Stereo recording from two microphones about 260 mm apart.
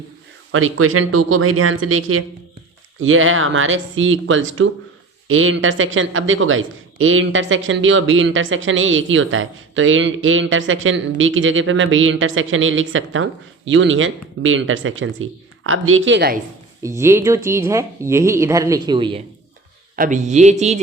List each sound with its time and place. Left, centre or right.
0.5 s speech: right
16.8 s speech: centre
20.0 s speech: right